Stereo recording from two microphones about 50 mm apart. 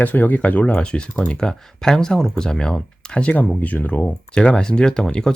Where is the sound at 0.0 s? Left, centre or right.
Left.